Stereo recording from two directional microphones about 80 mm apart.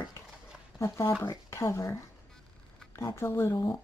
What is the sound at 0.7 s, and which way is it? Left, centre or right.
Speech, left.